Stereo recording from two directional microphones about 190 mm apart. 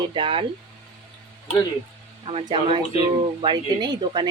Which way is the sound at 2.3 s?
30° right (ahead or behind).